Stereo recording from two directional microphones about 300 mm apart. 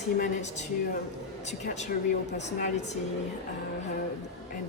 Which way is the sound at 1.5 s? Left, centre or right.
Left.